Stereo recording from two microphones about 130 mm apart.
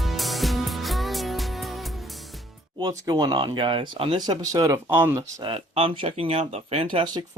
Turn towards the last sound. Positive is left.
turn(degrees=-40)  # may be behind; listen again after turning